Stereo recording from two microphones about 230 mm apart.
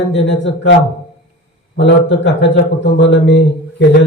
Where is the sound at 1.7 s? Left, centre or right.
Left.